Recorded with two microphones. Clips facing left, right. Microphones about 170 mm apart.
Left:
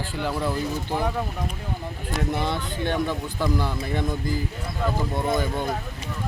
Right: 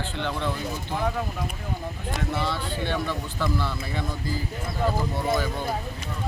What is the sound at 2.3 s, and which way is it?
Speech, 20° left (ahead or behind).